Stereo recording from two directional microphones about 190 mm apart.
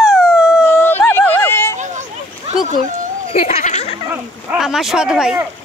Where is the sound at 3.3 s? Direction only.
35° left (ahead or behind).